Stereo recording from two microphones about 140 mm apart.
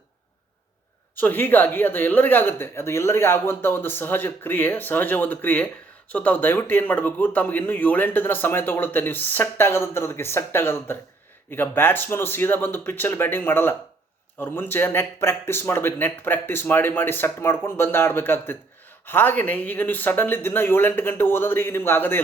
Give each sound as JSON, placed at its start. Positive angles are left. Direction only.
{"t": 1.1, "sound": "speech", "side_deg": 15}